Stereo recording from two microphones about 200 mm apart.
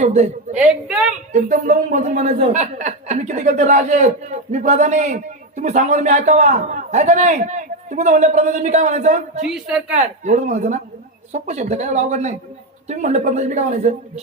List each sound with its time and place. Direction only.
0.0 s a woman's voice: 35° right (ahead or behind)
0.6 s a woman's voice: 5° right (ahead or behind)
1.3 s speech: 40° right (ahead or behind)